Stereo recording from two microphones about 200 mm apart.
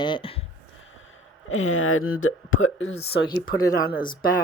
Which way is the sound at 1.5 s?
75° left (ahead or behind).